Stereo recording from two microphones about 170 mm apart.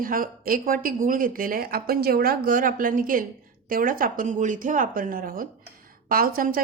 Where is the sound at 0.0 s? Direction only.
55° right (ahead or behind).